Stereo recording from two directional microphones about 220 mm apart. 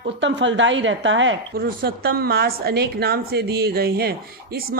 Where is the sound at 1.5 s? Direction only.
40° right (ahead or behind).